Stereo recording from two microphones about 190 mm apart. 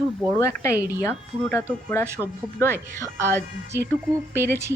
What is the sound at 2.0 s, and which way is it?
Speech, 15° right (ahead or behind).